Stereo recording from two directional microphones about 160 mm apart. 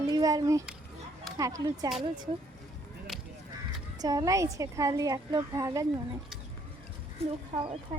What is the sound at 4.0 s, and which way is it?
A woman's voice, 25° right (ahead or behind).